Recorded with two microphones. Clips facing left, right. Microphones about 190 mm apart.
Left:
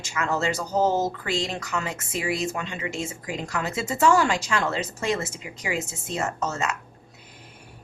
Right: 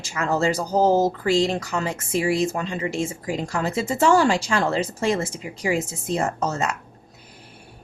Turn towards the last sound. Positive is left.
turn(degrees=-35)  # may be behind; listen again after turning